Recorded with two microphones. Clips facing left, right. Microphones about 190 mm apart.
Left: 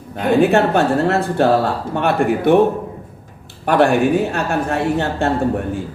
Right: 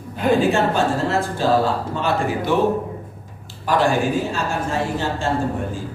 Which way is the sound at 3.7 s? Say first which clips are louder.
Left 5 dB; 65° left (ahead or behind).